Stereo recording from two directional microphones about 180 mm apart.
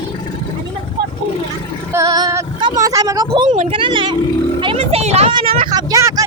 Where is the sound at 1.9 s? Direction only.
20° right (ahead or behind).